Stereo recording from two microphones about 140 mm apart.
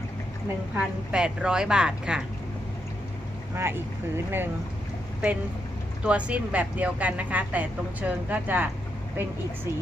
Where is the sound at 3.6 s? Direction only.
15° right (ahead or behind).